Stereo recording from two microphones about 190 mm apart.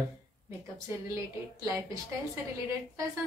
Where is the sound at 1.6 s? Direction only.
15° right (ahead or behind).